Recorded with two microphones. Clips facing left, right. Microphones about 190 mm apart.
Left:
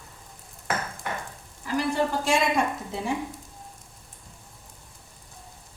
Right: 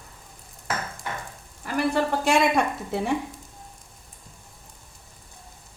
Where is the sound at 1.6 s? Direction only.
60° right (ahead or behind).